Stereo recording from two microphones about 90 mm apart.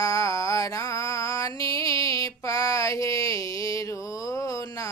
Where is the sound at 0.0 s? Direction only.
40° left (ahead or behind).